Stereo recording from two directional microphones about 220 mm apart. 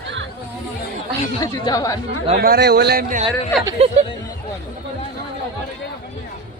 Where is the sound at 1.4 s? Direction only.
15° left (ahead or behind).